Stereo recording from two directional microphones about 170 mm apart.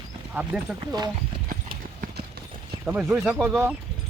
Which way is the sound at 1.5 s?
55° right (ahead or behind).